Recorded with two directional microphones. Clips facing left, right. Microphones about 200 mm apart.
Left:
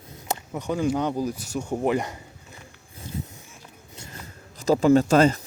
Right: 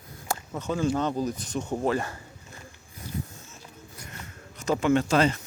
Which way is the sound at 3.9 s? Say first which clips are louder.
Left 3 dB; 30° left (ahead or behind).